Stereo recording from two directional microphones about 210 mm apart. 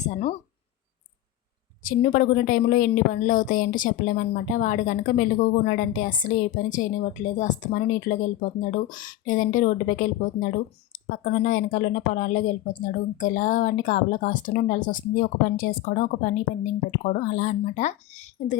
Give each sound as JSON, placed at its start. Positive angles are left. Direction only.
{"t": 0.0, "sound": "speech", "side_deg": 35}
{"t": 1.8, "sound": "a woman's voice", "side_deg": 40}